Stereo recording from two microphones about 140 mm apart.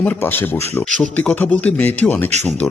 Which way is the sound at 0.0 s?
15° left (ahead or behind).